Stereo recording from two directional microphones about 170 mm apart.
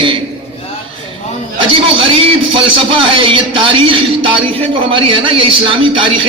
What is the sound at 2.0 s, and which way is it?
A man's voice, 30° right (ahead or behind).